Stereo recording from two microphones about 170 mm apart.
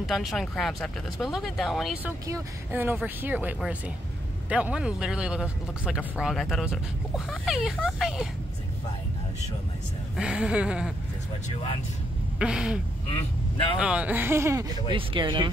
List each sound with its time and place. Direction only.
0.0 s speech: centre (ahead or behind)
2.2 s speech: 15° right (ahead or behind)
10.1 s speech: 5° right (ahead or behind)
11.4 s speech: 35° left (ahead or behind)
12.4 s speech: 5° right (ahead or behind)
13.1 s speech: 30° left (ahead or behind)
13.7 s speech: 5° right (ahead or behind)
14.9 s speech: 30° right (ahead or behind)